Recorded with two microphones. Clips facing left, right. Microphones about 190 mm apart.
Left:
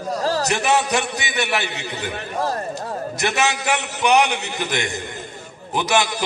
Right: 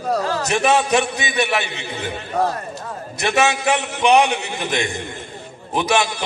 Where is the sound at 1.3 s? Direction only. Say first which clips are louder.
Right 3 dB; 20° right (ahead or behind).